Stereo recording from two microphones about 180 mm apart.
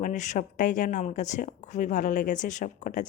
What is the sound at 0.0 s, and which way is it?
Speech, 40° left (ahead or behind).